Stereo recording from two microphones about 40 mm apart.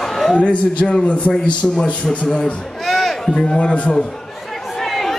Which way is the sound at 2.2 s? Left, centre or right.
Centre.